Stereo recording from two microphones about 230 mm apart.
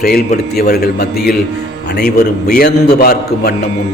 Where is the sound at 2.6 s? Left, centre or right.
Left.